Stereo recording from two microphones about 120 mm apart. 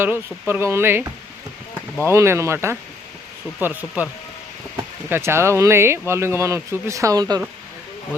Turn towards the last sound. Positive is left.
turn(degrees=-30)  # may be behind; listen again after turning